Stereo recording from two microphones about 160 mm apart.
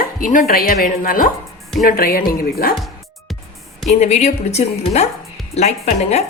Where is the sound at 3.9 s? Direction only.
45° left (ahead or behind).